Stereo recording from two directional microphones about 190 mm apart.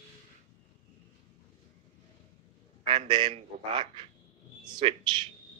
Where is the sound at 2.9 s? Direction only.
25° right (ahead or behind).